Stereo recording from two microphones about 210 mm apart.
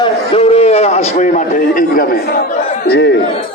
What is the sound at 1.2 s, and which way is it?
A man's voice, 35° left (ahead or behind).